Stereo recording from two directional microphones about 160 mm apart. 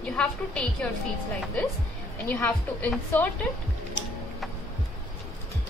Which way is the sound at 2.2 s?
10° left (ahead or behind).